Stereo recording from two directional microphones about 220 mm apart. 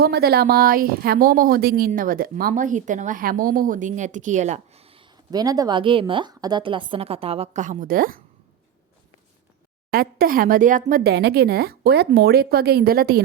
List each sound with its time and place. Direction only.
0.0 s speech: 45° right (ahead or behind)
9.9 s speech: 40° right (ahead or behind)